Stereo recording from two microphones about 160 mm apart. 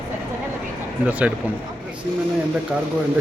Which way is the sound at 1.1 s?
10° right (ahead or behind).